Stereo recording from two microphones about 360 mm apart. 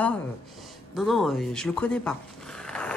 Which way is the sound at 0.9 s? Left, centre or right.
Centre.